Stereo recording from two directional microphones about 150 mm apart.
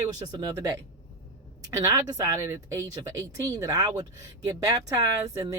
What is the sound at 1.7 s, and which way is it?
Speech, 25° right (ahead or behind).